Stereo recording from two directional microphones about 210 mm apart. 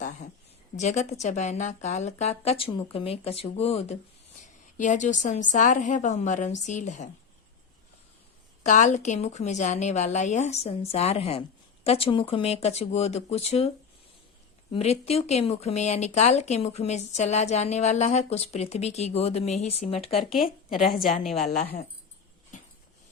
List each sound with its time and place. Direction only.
0.0 s a sound: 35° left (ahead or behind)
0.8 s a woman's voice: 35° left (ahead or behind)
8.6 s speech: 35° left (ahead or behind)
14.7 s speech: 30° left (ahead or behind)
20.9 s a woman's voice: 45° left (ahead or behind)